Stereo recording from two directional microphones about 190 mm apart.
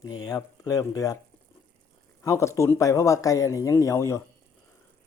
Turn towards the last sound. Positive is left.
turn(degrees=15)  # may be behind; listen again after turning